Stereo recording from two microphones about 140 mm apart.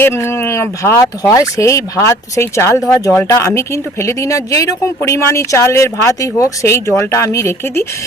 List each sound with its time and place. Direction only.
0.0 s speech: 20° left (ahead or behind)